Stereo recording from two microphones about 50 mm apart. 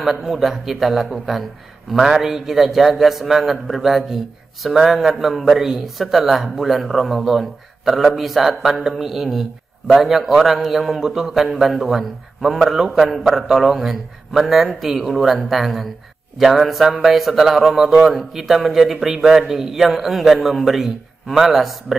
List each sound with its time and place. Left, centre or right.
0.0 s a man's voice: centre